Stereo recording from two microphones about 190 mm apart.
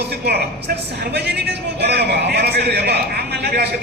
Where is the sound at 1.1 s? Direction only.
60° right (ahead or behind).